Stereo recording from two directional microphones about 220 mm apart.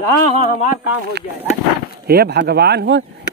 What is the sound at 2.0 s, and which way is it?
Speech, 45° right (ahead or behind).